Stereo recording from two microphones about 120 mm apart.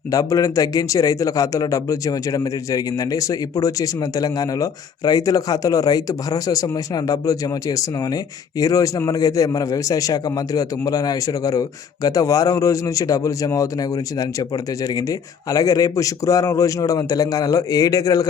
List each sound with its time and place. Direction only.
0.1 s a man's voice: 30° left (ahead or behind)